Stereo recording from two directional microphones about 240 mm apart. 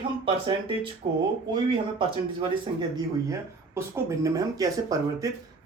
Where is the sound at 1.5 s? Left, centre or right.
Centre.